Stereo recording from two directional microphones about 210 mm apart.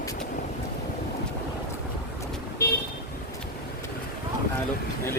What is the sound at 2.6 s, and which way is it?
Vehicle, 50° left (ahead or behind).